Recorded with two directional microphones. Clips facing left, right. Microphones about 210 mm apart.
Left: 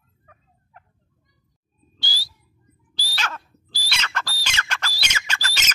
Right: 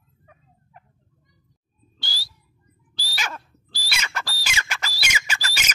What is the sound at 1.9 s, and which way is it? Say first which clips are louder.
Bird: left 2 dB; centre (ahead or behind).